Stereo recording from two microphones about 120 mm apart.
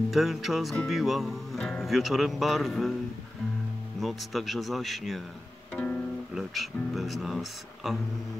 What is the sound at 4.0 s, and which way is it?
Speech, centre (ahead or behind).